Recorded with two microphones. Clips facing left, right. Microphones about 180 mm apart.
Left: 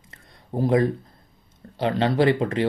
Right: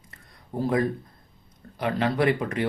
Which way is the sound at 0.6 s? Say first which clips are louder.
Left 4 dB; 25° left (ahead or behind).